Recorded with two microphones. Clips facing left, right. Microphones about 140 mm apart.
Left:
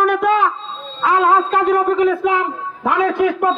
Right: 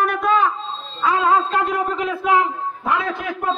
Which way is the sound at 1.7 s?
60° left (ahead or behind).